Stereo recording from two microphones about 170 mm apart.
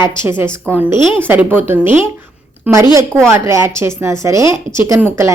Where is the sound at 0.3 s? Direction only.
15° right (ahead or behind).